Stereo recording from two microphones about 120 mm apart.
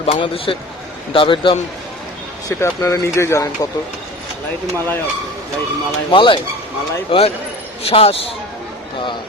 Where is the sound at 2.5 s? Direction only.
20° left (ahead or behind).